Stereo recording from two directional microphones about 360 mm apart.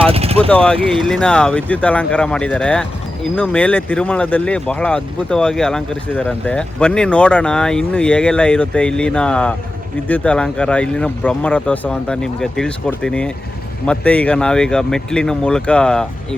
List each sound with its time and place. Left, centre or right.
0.0 s vehicle: centre
0.5 s speech: centre